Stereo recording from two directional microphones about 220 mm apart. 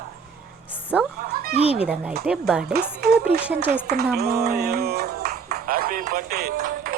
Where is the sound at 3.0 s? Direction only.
45° right (ahead or behind).